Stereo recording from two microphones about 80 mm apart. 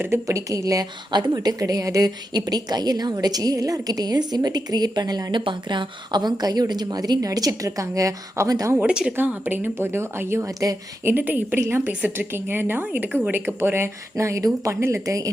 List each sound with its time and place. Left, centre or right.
0.3 s speech: right
1.1 s speech: right
8.8 s speech: centre; by 10.4 s right
10.4 s speech: right
11.0 s a woman's voice: right